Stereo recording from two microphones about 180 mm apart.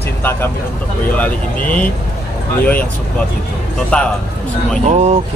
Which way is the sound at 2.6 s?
10° left (ahead or behind).